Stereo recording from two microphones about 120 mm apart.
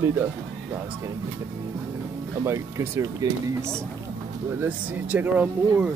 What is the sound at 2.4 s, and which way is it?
Speech, 25° right (ahead or behind).